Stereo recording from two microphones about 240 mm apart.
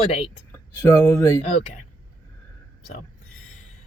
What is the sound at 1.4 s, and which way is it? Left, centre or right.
Speech, left.